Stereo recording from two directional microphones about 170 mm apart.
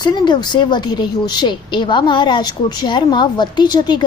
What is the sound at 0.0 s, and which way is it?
A woman's voice, 25° left (ahead or behind).